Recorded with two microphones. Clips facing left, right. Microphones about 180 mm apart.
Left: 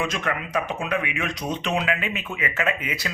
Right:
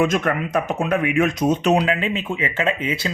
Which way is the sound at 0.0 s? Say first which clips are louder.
Right 8 dB; 50° right (ahead or behind).